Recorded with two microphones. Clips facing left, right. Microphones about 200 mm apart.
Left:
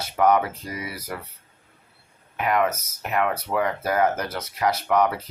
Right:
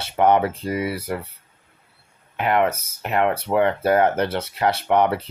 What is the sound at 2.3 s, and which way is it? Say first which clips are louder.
Speech: right 3 dB; 30° right (ahead or behind).